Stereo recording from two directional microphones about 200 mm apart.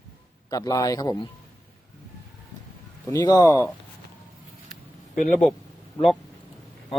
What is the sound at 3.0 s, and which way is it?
Speech, 20° left (ahead or behind).